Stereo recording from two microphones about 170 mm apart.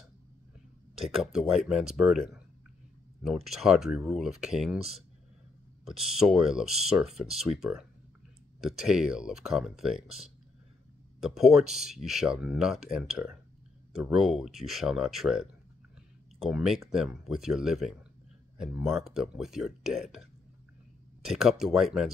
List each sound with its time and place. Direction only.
1.2 s speech: 5° right (ahead or behind)
5.9 s speech: centre (ahead or behind)
16.4 s speech: centre (ahead or behind)